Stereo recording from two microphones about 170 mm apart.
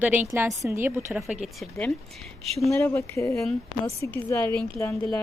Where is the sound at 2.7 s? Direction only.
15° left (ahead or behind).